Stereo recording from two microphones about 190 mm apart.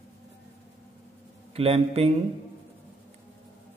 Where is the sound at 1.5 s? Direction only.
30° right (ahead or behind).